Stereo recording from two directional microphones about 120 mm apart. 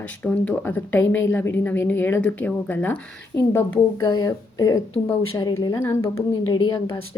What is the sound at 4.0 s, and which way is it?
A woman's voice, 35° left (ahead or behind).